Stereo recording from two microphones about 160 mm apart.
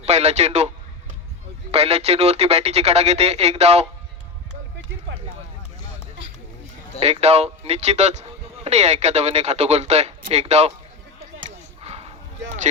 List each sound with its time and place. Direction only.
0.0 s speech: 45° right (ahead or behind)
1.7 s speech: 40° right (ahead or behind)
7.0 s speech: 40° right (ahead or behind)
11.3 s chop: 45° right (ahead or behind)